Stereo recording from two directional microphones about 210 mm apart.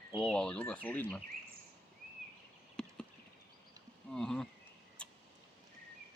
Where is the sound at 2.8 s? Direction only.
5° left (ahead or behind).